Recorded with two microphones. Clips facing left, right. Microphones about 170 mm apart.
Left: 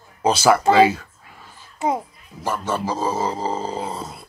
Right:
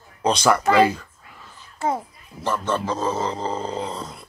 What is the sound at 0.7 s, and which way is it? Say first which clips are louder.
Child singing: left 2 dB; centre (ahead or behind).